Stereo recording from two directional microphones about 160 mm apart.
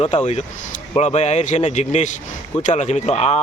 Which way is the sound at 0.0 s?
40° left (ahead or behind).